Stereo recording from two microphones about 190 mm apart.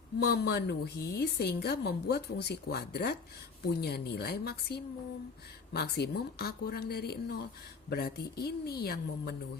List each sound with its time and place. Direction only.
0.2 s a woman's voice: 60° left (ahead or behind)